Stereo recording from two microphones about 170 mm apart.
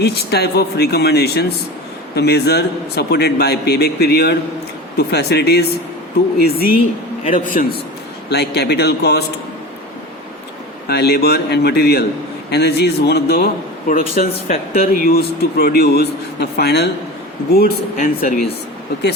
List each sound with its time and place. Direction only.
0.0 s a man's voice: 70° left (ahead or behind)
7.3 s a man's voice: 50° left (ahead or behind)
8.3 s a man's voice: 75° left (ahead or behind)
10.8 s a man's voice: 70° left (ahead or behind)
14.2 s a man's voice: 50° left (ahead or behind)
14.5 s speech: 35° left (ahead or behind)
15.0 s a man's voice: 65° left (ahead or behind)
17.5 s speech: 60° left (ahead or behind)